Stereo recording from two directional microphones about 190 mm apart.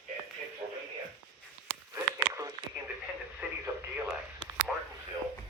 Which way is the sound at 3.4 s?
10° right (ahead or behind).